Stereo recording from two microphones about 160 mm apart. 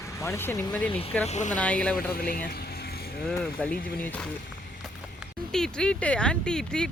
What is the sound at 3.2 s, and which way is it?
Speech, 5° left (ahead or behind).